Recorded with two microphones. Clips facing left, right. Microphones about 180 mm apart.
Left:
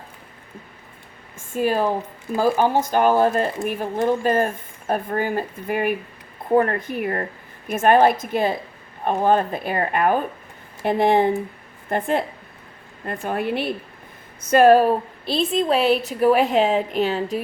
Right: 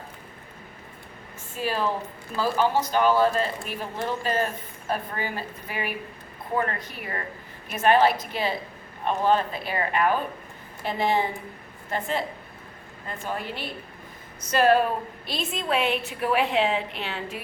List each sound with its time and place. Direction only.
1.5 s a woman's voice: 50° left (ahead or behind)
13.2 s a woman's voice: 60° left (ahead or behind)
14.5 s a woman's voice: 45° left (ahead or behind)